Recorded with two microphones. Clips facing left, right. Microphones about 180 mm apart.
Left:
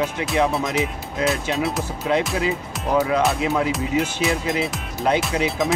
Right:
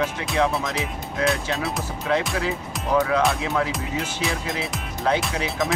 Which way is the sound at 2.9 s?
15° left (ahead or behind).